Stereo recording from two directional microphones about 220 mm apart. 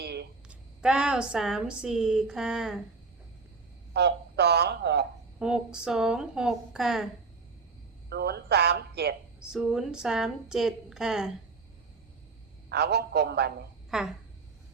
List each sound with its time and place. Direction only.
0.0 s a sound: 50° right (ahead or behind)
0.4 s a woman's voice: 5° right (ahead or behind)
3.9 s a sound: 50° right (ahead or behind)
5.4 s a woman's voice: 5° right (ahead or behind)
8.1 s speech: 45° right (ahead or behind)
9.4 s a woman's voice: 5° right (ahead or behind)
12.6 s a man's voice: 50° right (ahead or behind)
13.9 s a woman's voice: centre (ahead or behind)